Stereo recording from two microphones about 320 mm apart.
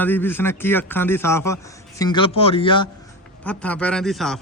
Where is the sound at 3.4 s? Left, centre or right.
Centre.